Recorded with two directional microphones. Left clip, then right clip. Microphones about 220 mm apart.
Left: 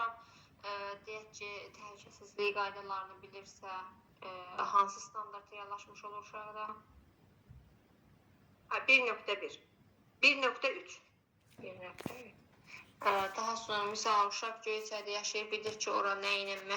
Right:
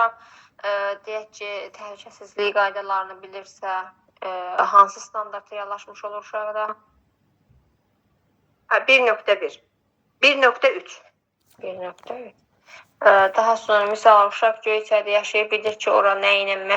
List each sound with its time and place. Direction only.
0.0 s speech: 40° right (ahead or behind)
8.6 s speech: 40° right (ahead or behind)